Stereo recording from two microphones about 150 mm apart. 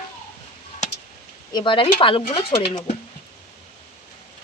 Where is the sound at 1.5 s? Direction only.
35° left (ahead or behind).